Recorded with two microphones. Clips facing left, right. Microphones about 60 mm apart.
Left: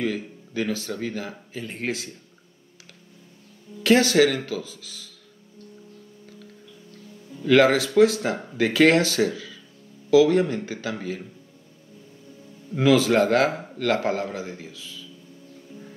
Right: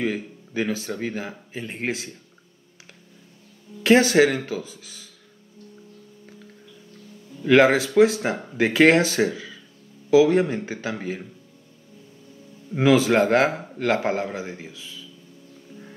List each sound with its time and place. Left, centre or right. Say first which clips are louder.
0.5 s a man's voice: right 1 dB; right
3.8 s a man's voice: right 2 dB; right
7.4 s a man's voice: right 1 dB; right
12.7 s a man's voice: right 1 dB; right